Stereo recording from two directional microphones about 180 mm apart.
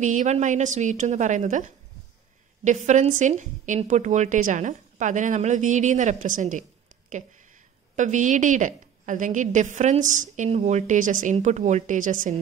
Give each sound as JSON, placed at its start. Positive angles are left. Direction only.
{"t": 0.0, "sound": "a woman's voice", "side_deg": -45}
{"t": 7.9, "sound": "a woman's voice", "side_deg": -45}